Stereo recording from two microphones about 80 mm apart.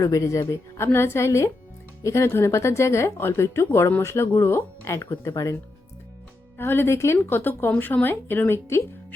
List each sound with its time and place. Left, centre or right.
0.0 s speech: left
6.6 s a woman's voice: left